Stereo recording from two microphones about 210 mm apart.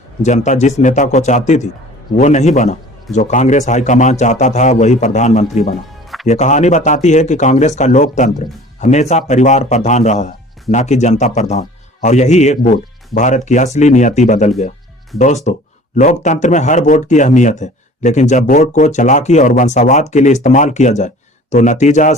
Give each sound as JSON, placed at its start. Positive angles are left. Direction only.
{"t": 0.2, "sound": "speech", "side_deg": 35}